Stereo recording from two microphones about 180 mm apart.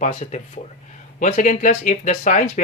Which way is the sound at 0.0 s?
40° left (ahead or behind).